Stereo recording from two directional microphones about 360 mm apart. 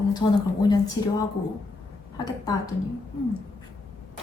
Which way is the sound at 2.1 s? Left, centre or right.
Centre.